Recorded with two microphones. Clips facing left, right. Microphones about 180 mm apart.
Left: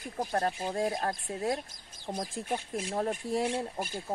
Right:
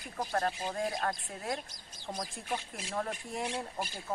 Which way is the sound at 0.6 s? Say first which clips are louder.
Left 4 dB; 45° left (ahead or behind).